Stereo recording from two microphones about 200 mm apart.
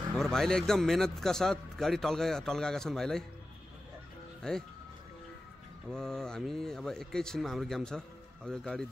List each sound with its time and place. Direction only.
0.1 s a man's voice: centre (ahead or behind)
4.4 s speech: 5° left (ahead or behind)
5.9 s a man's voice: 5° left (ahead or behind)